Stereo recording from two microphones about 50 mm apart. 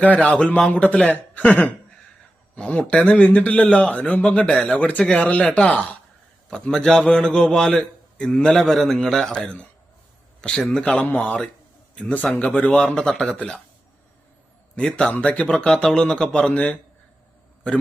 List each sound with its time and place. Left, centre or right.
0.0 s speech: left
5.4 s speech: centre
5.6 s speech: left
6.5 s a man's voice: centre
8.5 s a man's voice: centre
10.8 s speech: centre
13.3 s speech: left
14.8 s speech: centre
16.5 s speech: left